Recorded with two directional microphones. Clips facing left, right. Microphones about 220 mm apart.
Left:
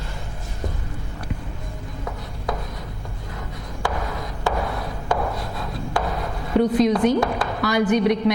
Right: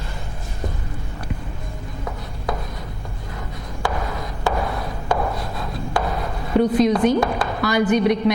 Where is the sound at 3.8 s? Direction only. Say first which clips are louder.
Right 1 dB; 20° right (ahead or behind).